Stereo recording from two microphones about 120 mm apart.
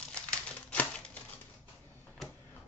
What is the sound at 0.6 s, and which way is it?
Typewriter, 10° left (ahead or behind).